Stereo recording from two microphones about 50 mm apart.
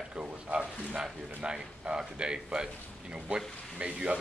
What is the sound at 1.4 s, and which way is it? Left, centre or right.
A man's voice, centre.